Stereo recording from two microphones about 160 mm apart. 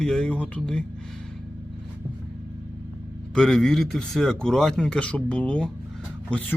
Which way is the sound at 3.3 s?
5° left (ahead or behind).